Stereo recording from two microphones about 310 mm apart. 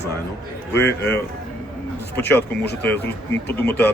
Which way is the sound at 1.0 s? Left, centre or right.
Centre.